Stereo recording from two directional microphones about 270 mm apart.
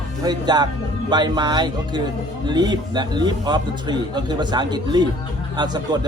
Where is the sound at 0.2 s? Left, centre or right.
Centre.